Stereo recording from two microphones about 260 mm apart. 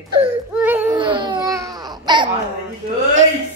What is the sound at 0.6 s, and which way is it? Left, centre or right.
Baby cry, centre.